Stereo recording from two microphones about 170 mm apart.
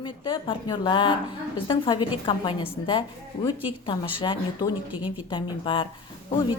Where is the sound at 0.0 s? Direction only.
25° left (ahead or behind).